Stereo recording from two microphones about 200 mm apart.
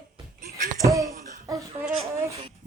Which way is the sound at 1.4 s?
15° right (ahead or behind).